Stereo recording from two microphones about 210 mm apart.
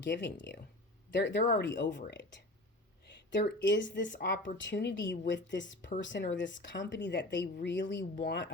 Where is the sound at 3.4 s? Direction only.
50° left (ahead or behind).